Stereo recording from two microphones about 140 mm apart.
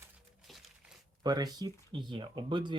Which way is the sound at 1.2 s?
30° right (ahead or behind).